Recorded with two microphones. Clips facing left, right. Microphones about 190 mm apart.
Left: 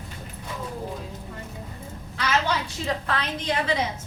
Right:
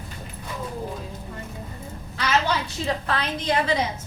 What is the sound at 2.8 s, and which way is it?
Speech, 35° right (ahead or behind).